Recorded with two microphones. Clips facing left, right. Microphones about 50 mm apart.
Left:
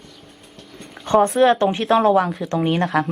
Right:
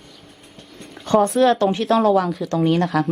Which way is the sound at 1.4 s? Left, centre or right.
Left.